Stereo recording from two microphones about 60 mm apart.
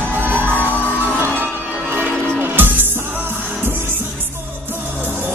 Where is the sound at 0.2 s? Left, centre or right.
Right.